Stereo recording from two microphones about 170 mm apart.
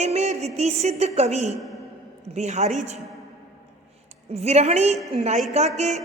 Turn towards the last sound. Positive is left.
turn(degrees=-40)  # may be behind; listen again after turning